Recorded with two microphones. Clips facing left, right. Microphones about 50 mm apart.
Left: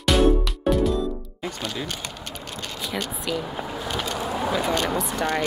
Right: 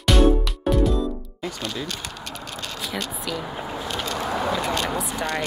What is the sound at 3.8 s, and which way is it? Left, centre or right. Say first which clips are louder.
Vehicle: even; centre.